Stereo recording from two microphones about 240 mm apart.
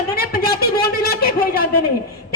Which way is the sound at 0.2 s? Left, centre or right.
Left.